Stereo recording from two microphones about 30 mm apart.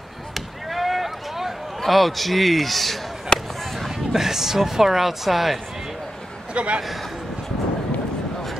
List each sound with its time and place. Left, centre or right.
0.3 s chop: centre
1.9 s a man's voice: centre
3.3 s a sound: left
3.9 s speech: centre
6.5 s a man's voice: right